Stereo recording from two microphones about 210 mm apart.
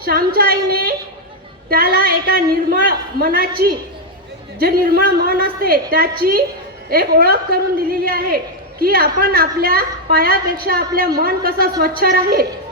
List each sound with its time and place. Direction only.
0.0 s a woman's voice: 45° right (ahead or behind)